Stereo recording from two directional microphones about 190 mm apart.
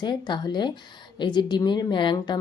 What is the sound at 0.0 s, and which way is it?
A woman's voice, 25° left (ahead or behind).